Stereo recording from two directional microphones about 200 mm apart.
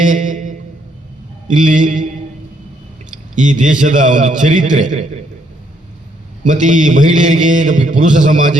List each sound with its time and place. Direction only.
0.0 s a sound: 40° right (ahead or behind)
1.5 s a man's voice: 40° right (ahead or behind)
3.3 s a man's voice: 40° right (ahead or behind)
6.4 s a man's voice: 40° right (ahead or behind)